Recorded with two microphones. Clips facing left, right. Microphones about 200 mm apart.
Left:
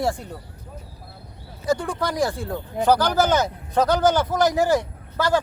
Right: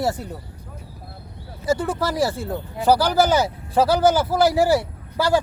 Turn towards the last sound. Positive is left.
turn(degrees=-10)  # may be behind; listen again after turning